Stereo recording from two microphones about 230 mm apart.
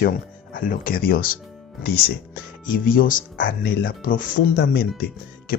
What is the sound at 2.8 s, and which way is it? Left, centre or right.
Speech, left.